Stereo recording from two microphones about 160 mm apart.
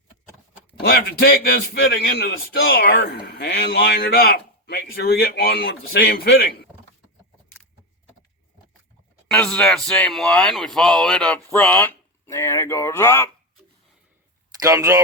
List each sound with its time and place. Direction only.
0.8 s a man's voice: 85° left
9.3 s speech: 5° left (ahead or behind)
14.6 s speech: 20° right (ahead or behind)